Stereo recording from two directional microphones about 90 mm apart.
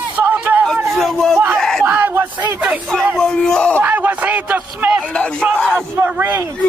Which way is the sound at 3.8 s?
20° right (ahead or behind).